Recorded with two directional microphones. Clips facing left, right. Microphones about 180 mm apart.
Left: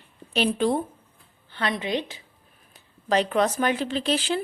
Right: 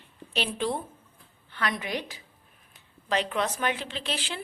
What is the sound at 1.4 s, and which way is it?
Speech, 30° left (ahead or behind).